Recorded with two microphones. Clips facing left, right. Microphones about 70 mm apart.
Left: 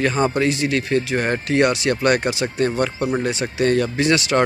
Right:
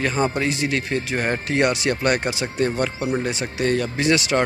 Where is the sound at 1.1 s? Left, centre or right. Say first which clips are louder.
Left 2 dB; centre.